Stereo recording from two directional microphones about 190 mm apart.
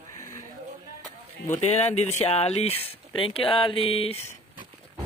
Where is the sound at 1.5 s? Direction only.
35° left (ahead or behind).